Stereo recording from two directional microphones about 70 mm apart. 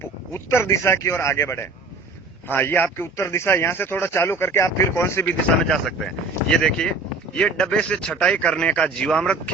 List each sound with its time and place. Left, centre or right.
0.3 s speech: left
5.6 s speech: centre